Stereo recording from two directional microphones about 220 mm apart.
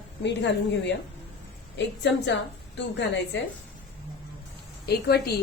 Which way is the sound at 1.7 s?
55° left (ahead or behind).